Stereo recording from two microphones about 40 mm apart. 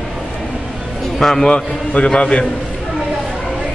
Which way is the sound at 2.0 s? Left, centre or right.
Left.